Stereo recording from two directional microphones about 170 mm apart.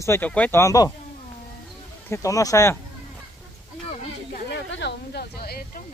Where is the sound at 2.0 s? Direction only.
15° left (ahead or behind).